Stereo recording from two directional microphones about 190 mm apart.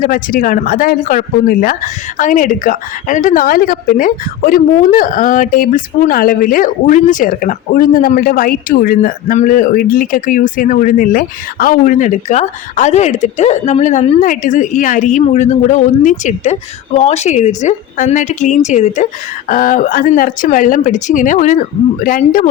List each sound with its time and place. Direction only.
0.0 s speech: 45° left (ahead or behind)